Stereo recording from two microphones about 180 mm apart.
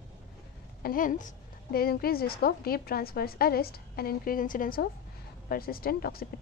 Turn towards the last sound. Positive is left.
turn(degrees=55)  # may be behind; listen again after turning